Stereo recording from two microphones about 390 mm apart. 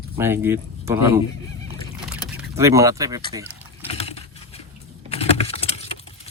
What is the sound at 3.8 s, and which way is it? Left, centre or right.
Typing, centre.